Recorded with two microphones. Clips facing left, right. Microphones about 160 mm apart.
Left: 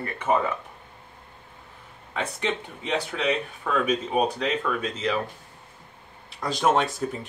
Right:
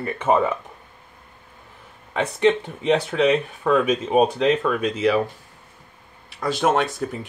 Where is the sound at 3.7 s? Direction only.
40° right (ahead or behind).